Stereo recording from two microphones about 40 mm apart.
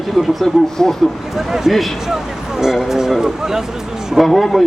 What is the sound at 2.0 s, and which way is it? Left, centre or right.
Speech, centre.